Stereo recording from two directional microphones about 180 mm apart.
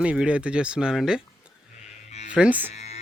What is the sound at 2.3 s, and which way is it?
Speech, 5° right (ahead or behind).